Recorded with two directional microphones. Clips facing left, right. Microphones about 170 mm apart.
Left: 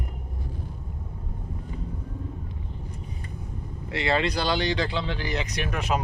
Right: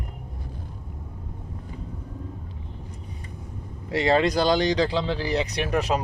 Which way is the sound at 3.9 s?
40° right (ahead or behind).